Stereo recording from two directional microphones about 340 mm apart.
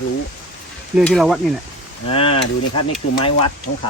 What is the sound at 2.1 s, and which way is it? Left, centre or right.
Speech, centre.